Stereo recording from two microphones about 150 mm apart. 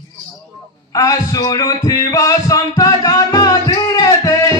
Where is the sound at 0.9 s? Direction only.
25° left (ahead or behind).